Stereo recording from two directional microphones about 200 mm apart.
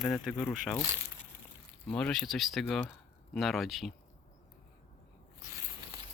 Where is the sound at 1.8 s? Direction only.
5° left (ahead or behind).